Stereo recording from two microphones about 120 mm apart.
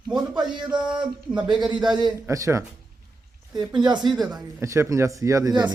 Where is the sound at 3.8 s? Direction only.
35° right (ahead or behind).